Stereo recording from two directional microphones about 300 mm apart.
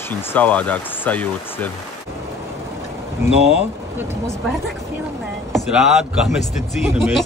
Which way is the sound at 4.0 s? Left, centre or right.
Centre.